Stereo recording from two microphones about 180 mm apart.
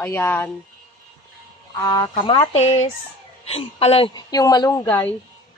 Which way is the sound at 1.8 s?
25° left (ahead or behind).